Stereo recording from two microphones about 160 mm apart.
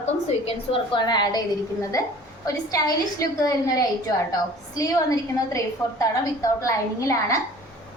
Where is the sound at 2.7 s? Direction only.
20° left (ahead or behind).